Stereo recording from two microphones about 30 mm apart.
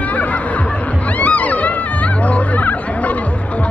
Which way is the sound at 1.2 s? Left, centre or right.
Left.